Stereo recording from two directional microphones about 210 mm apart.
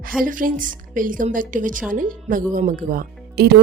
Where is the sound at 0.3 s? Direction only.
40° right (ahead or behind).